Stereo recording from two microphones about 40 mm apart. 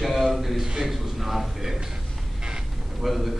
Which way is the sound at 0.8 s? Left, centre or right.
Centre.